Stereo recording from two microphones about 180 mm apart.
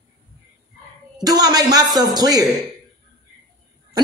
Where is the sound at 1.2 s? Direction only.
20° right (ahead or behind).